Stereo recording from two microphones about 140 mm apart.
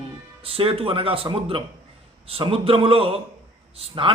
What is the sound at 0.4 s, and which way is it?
A man's voice, 40° right (ahead or behind).